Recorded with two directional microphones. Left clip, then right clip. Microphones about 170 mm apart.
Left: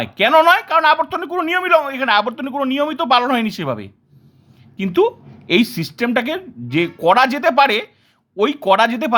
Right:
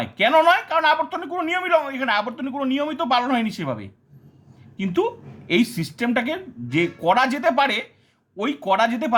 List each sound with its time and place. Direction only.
0.0 s speech: 30° left (ahead or behind)